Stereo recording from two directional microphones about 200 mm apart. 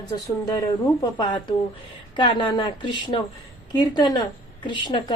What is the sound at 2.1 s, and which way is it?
A woman's voice, 25° left (ahead or behind).